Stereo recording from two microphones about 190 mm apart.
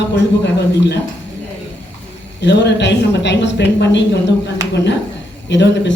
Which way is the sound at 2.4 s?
65° left (ahead or behind).